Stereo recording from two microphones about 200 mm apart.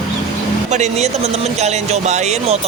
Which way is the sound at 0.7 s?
35° right (ahead or behind).